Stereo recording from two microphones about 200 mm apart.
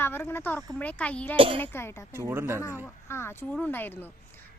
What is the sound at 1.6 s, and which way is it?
Speech, 10° left (ahead or behind).